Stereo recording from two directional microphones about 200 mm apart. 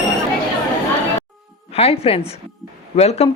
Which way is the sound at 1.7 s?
30° left (ahead or behind).